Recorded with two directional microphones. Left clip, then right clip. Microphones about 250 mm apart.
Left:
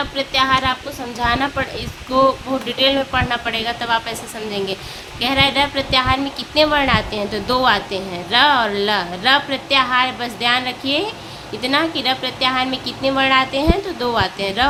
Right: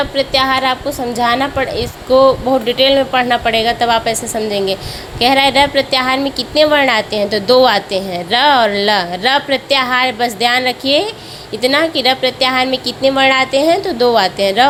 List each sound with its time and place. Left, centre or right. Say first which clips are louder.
0.0 s a woman's voice: right 5 dB; centre